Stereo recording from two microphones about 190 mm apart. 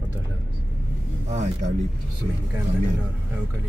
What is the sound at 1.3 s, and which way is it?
Speech, 35° right (ahead or behind).